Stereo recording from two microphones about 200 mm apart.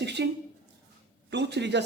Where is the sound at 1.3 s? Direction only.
60° right (ahead or behind).